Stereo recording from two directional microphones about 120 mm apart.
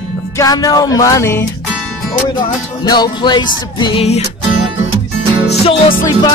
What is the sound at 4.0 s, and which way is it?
Music, 60° left (ahead or behind).